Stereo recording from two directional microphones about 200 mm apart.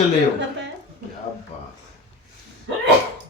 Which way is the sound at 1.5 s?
30° left (ahead or behind).